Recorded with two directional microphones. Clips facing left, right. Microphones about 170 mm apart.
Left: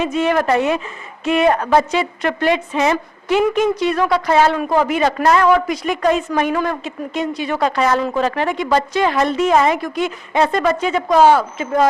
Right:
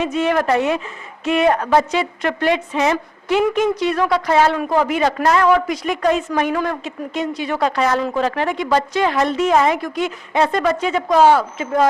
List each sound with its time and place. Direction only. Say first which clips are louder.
0.0 s a woman's voice: left 1 dB; 10° left (ahead or behind)
1.5 s a woman's voice: left 1 dB; 20° left (ahead or behind)
1.9 s a woman's voice: left 1 dB; 10° left (ahead or behind)